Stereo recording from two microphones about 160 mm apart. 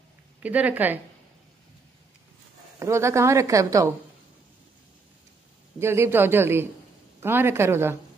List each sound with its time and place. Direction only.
0.4 s a man's voice: 10° right (ahead or behind)
2.8 s a woman's voice: 15° right (ahead or behind)
5.8 s a man's voice: 15° right (ahead or behind)